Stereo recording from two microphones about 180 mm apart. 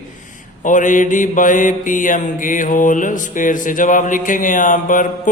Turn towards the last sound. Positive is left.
turn(degrees=45)  # may be behind; listen again after turning